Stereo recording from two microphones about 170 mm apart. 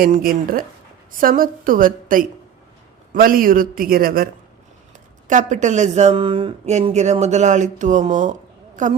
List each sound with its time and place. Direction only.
0.0 s a man's voice: 60° right (ahead or behind)
5.3 s speech: 45° right (ahead or behind)